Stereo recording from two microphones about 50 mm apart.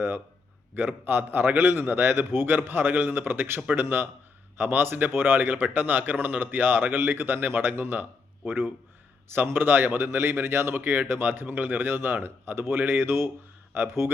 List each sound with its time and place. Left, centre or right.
0.7 s a man's voice: right
9.3 s a man's voice: right